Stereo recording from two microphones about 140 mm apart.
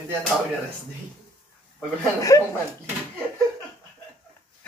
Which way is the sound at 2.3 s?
25° left (ahead or behind).